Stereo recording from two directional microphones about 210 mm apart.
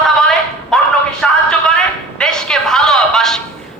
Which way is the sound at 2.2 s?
5° left (ahead or behind).